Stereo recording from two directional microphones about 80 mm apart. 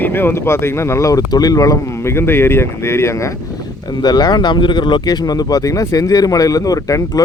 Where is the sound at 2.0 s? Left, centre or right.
Left.